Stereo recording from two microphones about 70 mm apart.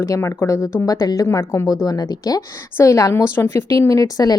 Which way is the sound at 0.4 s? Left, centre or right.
Left.